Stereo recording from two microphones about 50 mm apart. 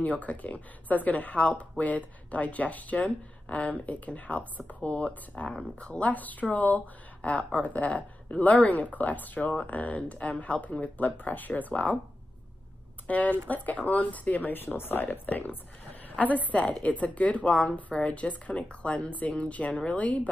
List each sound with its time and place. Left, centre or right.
0.0 s speech: left
13.0 s speech: left
14.5 s a woman's voice: left
19.7 s speech: centre